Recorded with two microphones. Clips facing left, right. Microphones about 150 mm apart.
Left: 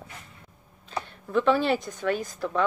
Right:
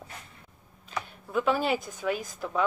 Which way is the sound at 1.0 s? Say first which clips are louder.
Left 4 dB; 5° right (ahead or behind).